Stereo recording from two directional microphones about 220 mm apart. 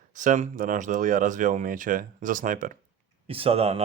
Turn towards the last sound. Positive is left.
turn(degrees=-25)  # may be behind; listen again after turning